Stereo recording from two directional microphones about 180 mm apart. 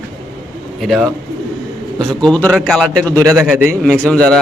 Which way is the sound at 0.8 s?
Centre (ahead or behind).